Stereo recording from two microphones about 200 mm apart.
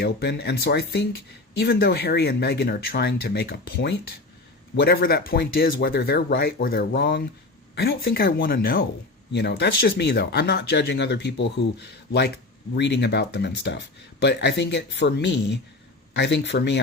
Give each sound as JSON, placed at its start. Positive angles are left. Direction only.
{"t": 0.0, "sound": "speech", "side_deg": 55}